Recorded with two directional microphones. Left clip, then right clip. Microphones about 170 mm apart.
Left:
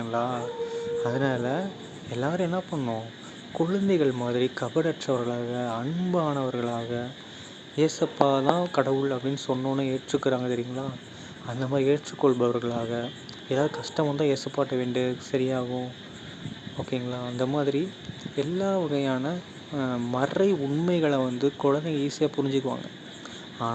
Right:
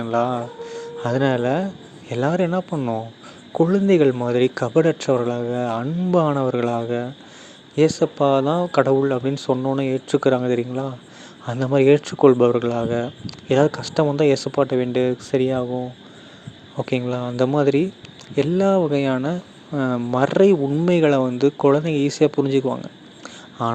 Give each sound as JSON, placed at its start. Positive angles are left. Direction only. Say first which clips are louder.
{"t": 0.0, "sound": "speech", "louder": "right 7 dB", "side_deg": -45}